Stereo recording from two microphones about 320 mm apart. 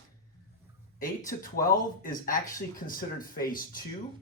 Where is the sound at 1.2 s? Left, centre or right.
Left.